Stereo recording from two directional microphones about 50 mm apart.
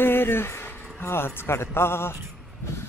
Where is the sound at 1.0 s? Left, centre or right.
Left.